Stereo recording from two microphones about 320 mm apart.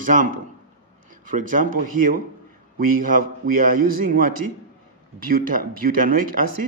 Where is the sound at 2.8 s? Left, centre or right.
Right.